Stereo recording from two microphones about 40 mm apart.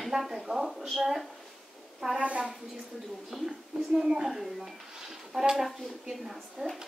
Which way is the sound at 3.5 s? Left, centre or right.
Centre.